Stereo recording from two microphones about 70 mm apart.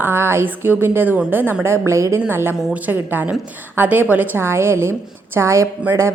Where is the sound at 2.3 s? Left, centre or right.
Right.